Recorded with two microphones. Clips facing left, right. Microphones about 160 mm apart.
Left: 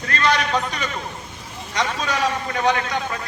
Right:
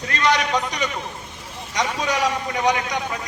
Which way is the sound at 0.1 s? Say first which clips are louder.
Even; 15° right (ahead or behind).